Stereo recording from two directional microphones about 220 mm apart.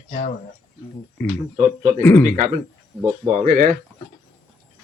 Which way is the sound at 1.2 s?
10° left (ahead or behind).